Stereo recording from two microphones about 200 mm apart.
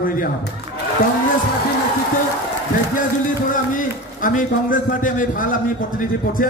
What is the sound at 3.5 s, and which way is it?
A man's voice, 40° left (ahead or behind).